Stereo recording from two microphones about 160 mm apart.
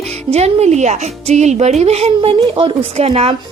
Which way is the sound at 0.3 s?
40° right (ahead or behind).